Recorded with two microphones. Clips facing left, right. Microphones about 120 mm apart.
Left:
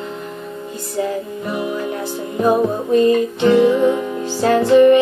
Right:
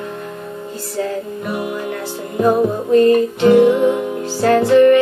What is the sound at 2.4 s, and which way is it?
Music, 15° left (ahead or behind).